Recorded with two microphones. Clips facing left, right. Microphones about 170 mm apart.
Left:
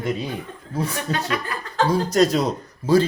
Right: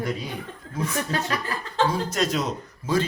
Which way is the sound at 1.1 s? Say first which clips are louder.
Left 2 dB; 35° right (ahead or behind).